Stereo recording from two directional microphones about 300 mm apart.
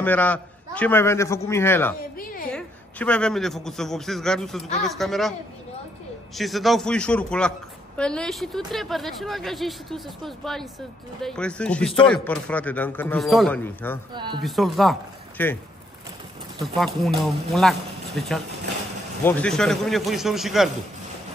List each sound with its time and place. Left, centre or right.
0.0 s a man's voice: centre
2.0 s a woman's voice: left
2.5 s a man's voice: centre
6.3 s speech: centre
14.1 s speech: centre
14.4 s speech: centre
16.6 s speech: centre